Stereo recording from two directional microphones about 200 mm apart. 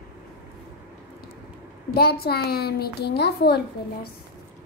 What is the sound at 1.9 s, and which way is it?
A child's voice, 50° left (ahead or behind).